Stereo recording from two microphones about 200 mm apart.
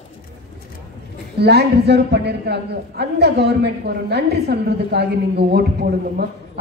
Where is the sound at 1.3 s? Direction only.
55° right (ahead or behind).